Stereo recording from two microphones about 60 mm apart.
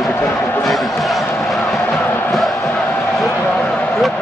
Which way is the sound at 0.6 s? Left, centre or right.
Centre.